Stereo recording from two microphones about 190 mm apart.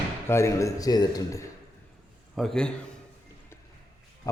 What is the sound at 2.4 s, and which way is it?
Speech, 5° left (ahead or behind).